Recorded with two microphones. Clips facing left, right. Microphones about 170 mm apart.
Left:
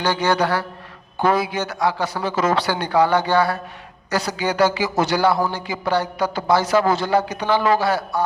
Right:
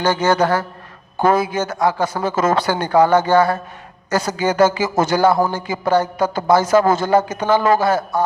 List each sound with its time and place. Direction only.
0.0 s a man's voice: 45° right (ahead or behind)